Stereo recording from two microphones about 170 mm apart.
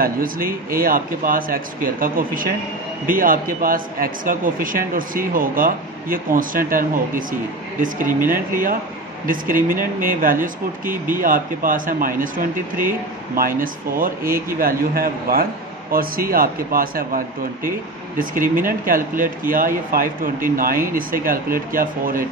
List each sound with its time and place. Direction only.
0.0 s speech: 60° right (ahead or behind)